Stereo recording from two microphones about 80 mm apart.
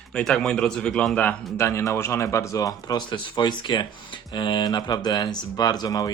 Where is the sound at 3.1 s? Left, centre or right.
Left.